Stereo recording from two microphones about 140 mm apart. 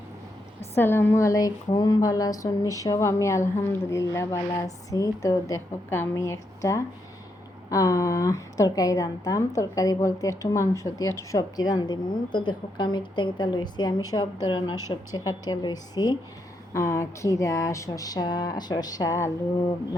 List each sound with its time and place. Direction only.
0.8 s a woman's voice: 15° left (ahead or behind)